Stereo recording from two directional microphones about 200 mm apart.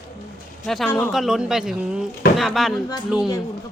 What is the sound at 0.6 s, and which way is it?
Speech, centre (ahead or behind).